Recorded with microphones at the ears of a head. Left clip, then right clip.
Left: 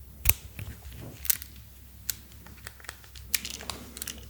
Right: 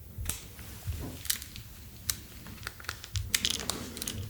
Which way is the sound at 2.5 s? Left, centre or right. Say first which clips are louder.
Right 4 dB; right.